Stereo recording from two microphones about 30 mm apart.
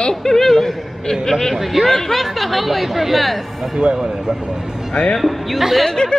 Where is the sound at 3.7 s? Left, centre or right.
Right.